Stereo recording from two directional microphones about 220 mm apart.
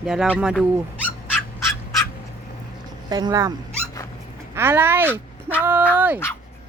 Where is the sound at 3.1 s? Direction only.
20° right (ahead or behind).